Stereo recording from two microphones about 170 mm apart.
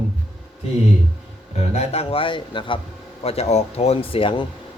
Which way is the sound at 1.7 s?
35° left (ahead or behind).